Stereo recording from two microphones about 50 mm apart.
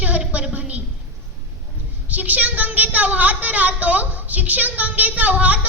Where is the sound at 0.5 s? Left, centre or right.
Right.